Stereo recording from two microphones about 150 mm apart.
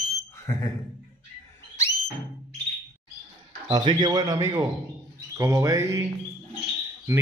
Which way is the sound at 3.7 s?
30° right (ahead or behind).